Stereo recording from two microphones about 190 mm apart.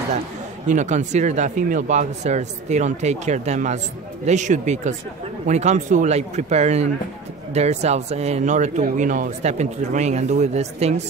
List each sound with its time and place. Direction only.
0.7 s speech: 40° right (ahead or behind)